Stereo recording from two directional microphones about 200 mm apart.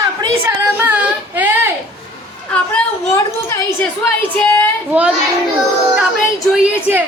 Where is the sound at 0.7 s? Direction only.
5° right (ahead or behind).